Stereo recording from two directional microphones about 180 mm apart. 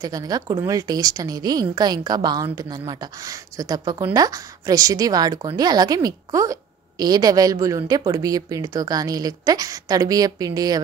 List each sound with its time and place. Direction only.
0.0 s a woman's voice: 20° right (ahead or behind)